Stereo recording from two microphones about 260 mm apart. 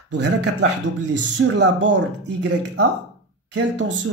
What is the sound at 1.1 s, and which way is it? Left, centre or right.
Speech, right.